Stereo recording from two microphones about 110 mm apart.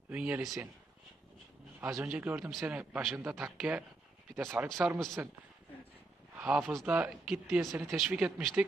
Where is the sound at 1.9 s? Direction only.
10° right (ahead or behind).